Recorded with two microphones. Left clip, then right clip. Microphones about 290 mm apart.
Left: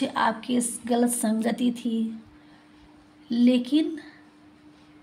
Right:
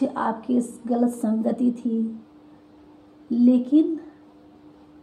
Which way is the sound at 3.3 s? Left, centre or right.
Left.